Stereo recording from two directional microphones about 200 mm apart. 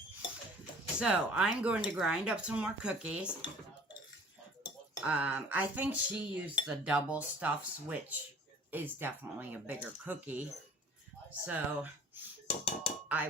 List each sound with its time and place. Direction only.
0.9 s speech: 5° right (ahead or behind)
4.6 s speech: 5° right (ahead or behind)
12.5 s a sound: 30° left (ahead or behind)